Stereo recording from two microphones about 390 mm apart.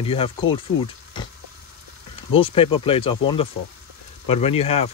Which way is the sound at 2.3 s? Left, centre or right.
Centre.